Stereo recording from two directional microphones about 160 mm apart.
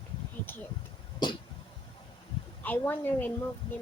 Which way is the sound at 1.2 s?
30° left (ahead or behind).